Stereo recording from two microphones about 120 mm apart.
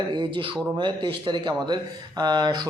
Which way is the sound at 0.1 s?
40° right (ahead or behind).